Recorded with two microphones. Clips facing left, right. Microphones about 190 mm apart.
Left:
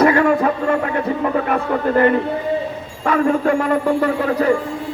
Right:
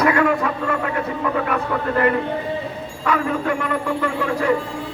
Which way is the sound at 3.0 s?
35° left (ahead or behind).